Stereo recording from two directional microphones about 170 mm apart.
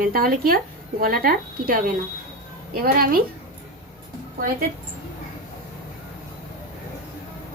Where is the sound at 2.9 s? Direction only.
60° right (ahead or behind).